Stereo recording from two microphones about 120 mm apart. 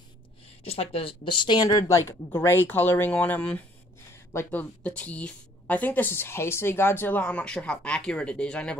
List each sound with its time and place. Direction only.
0.7 s a woman's voice: 55° left (ahead or behind); by 8.7 s 10° left (ahead or behind)